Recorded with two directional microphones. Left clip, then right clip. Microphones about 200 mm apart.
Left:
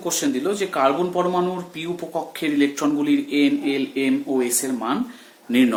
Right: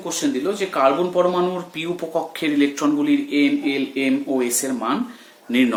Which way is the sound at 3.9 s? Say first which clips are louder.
Even; centre (ahead or behind).